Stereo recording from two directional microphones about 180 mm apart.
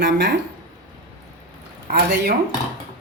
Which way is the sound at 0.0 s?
70° right (ahead or behind).